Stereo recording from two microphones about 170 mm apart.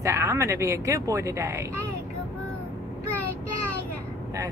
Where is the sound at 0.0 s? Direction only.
15° right (ahead or behind).